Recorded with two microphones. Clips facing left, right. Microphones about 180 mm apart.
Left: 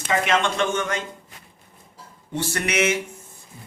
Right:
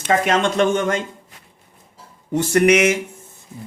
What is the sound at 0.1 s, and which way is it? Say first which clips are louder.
Speech: right 4 dB; 45° right (ahead or behind).